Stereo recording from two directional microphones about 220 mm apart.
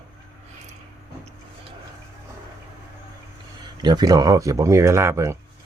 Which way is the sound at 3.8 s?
20° right (ahead or behind).